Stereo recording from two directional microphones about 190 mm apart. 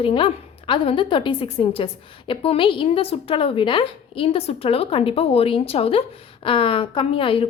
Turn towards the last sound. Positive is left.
turn(degrees=30)  # may be behind; listen again after turning